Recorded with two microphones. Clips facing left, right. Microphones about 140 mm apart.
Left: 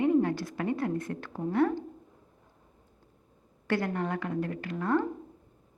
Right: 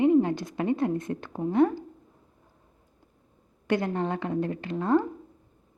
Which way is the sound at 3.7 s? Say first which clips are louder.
Right 3 dB; 20° right (ahead or behind).